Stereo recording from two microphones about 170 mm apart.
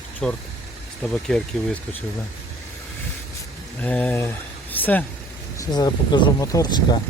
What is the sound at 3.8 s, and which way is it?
Speech, 10° left (ahead or behind).